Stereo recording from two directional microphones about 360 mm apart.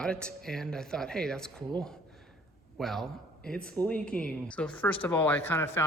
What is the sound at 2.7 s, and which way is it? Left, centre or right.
Speech, centre.